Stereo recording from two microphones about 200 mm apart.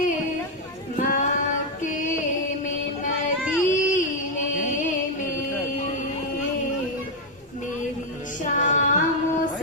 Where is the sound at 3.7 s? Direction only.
40° left (ahead or behind).